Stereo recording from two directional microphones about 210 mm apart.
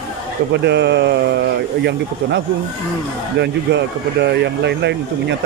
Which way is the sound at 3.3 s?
55° right (ahead or behind).